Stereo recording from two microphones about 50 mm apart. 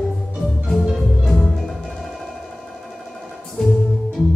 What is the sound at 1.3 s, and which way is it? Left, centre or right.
Music, centre.